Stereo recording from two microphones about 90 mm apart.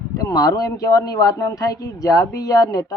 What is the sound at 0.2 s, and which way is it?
A man's voice, 40° left (ahead or behind).